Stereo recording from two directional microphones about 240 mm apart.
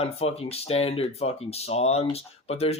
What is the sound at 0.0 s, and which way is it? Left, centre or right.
Speech, left.